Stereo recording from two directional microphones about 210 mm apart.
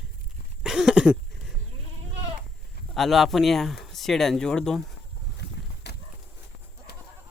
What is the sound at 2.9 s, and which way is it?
Speech, centre (ahead or behind).